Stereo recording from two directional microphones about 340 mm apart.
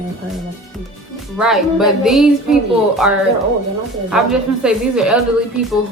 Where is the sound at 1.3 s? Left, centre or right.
Centre.